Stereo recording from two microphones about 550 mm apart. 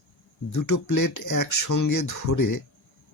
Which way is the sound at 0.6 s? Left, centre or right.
Left.